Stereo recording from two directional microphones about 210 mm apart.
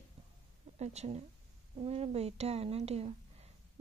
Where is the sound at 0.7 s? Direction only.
30° right (ahead or behind).